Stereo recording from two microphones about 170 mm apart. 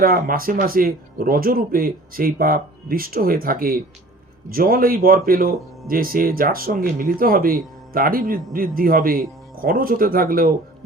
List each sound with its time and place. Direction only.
0.0 s speech: 60° right (ahead or behind)